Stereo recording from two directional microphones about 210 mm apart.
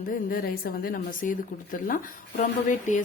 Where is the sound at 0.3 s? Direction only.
45° left (ahead or behind).